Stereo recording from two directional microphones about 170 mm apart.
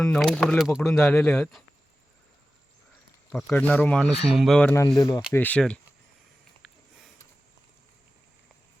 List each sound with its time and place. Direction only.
0.0 s speech: centre (ahead or behind)
0.8 s speech: 10° left (ahead or behind)
3.3 s speech: 5° left (ahead or behind)
4.9 s speech: 25° left (ahead or behind)
5.3 s speech: 10° left (ahead or behind)